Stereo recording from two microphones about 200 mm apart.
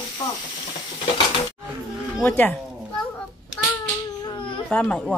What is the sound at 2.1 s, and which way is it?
Speech, 10° left (ahead or behind).